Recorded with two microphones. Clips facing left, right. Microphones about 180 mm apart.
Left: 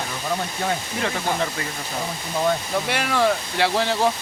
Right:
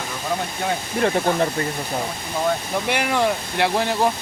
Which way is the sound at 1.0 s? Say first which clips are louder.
Right 8 dB; 50° right (ahead or behind).